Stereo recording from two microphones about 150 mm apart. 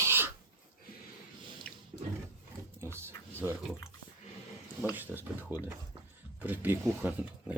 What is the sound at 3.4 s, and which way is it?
Speech, 15° right (ahead or behind).